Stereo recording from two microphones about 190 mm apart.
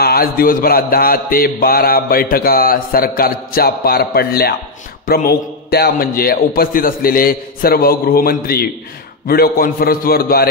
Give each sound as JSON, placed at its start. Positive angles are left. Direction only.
{"t": 0.0, "sound": "mantra", "side_deg": 50}